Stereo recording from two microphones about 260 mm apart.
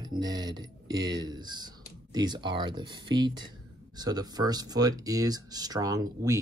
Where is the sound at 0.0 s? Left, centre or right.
Centre.